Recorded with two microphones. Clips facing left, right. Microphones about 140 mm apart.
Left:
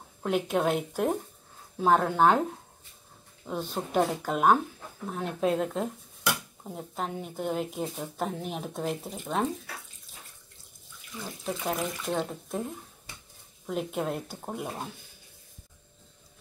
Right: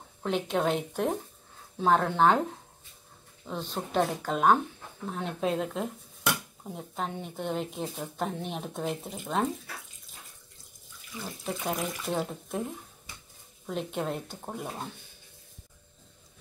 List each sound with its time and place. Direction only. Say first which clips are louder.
0.2 s speech: left 1 dB; 5° left (ahead or behind)
3.4 s speech: left 2 dB; 10° left (ahead or behind)
11.1 s speech: left 1 dB; centre (ahead or behind)
13.7 s speech: left 1 dB; 5° left (ahead or behind)